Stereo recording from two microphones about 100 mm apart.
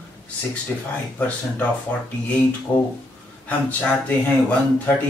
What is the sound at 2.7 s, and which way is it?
Speech, 20° left (ahead or behind).